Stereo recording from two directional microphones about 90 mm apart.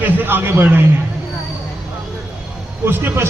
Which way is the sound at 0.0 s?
20° right (ahead or behind).